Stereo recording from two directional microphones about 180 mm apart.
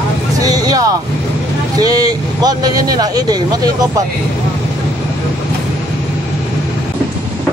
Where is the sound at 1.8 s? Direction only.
20° right (ahead or behind).